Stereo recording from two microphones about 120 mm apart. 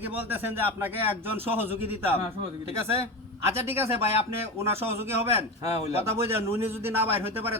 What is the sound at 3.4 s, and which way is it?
Speech, 20° right (ahead or behind).